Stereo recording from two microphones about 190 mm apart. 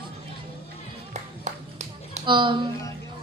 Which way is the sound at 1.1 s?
35° right (ahead or behind).